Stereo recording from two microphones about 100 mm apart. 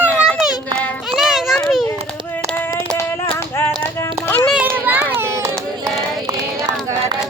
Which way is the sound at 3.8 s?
25° left (ahead or behind).